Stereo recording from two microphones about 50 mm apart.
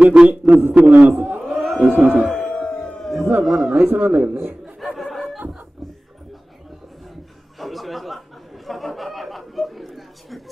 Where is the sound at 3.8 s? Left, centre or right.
Right.